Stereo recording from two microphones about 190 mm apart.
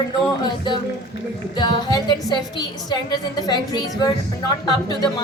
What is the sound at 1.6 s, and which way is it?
Music, 25° left (ahead or behind).